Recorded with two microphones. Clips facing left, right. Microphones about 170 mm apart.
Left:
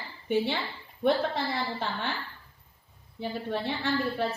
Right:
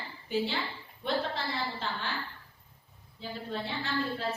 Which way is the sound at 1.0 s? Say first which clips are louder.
Left 6 dB; 60° left (ahead or behind).